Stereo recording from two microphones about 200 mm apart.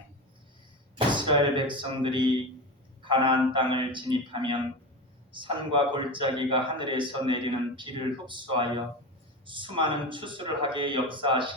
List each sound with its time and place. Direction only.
0.9 s a man's voice: 25° right (ahead or behind)